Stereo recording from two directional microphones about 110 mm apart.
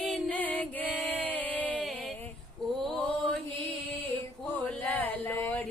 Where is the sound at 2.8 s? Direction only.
10° left (ahead or behind).